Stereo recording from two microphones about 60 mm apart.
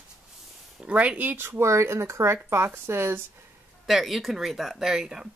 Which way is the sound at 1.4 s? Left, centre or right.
Right.